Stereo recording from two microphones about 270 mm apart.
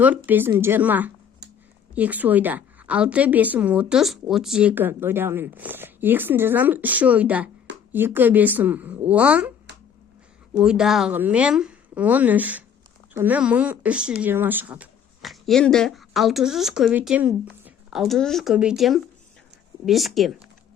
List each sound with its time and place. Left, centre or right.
0.3 s a woman's voice: centre
9.7 s a sound: right
10.6 s a woman's voice: centre